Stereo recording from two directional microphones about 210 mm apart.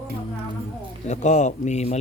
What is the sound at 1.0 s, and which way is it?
Speech, 35° left (ahead or behind).